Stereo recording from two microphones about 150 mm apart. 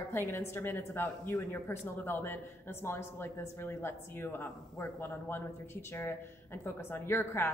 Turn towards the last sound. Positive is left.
turn(degrees=15)  # may be behind; listen again after turning